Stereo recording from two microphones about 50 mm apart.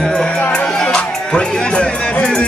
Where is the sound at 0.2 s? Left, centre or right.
Centre.